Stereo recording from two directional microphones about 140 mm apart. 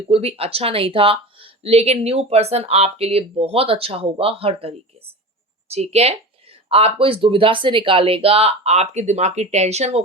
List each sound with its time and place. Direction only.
0.1 s speech: 45° right (ahead or behind)